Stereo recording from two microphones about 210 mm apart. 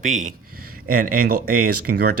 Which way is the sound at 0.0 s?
35° right (ahead or behind).